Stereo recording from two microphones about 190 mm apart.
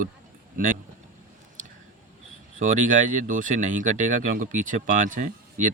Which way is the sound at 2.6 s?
45° right (ahead or behind).